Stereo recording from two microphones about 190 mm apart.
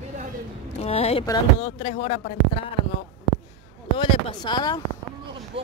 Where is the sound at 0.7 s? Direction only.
35° left (ahead or behind).